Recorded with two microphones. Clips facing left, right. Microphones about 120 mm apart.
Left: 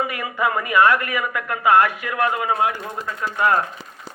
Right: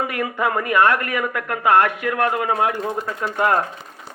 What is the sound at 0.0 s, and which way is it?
A man's voice, 50° right (ahead or behind).